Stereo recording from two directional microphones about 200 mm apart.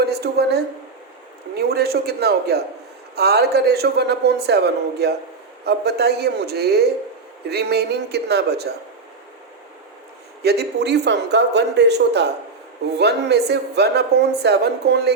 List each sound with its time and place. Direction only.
0.0 s a woman's voice: 55° right (ahead or behind)
10.4 s a woman's voice: 55° right (ahead or behind)